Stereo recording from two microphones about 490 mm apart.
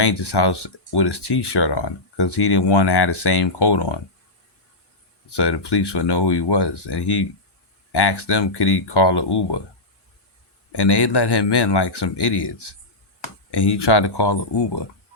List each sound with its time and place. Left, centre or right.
0.0 s speech: left
5.4 s speech: left
10.7 s speech: left